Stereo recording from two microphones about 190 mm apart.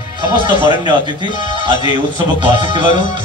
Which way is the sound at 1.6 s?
25° right (ahead or behind).